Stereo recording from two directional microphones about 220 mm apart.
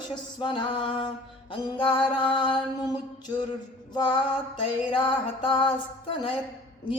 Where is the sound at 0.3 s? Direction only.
20° left (ahead or behind).